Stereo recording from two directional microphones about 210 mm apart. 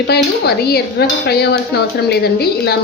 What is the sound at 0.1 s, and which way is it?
A woman's voice, 50° left (ahead or behind).